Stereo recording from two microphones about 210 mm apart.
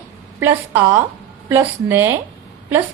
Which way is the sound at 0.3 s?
10° right (ahead or behind).